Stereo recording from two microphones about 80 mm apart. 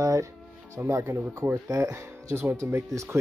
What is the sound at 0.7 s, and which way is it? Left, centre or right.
Speech, right.